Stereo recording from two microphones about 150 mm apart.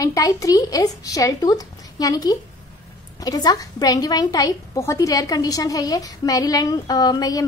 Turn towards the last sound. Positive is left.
turn(degrees=25)  # may be behind; listen again after turning